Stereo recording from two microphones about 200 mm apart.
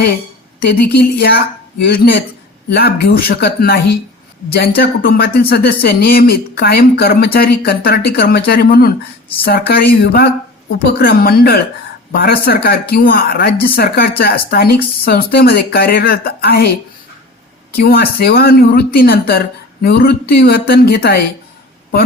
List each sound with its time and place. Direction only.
0.7 s speech: 55° left (ahead or behind)
17.7 s speech: 50° left (ahead or behind)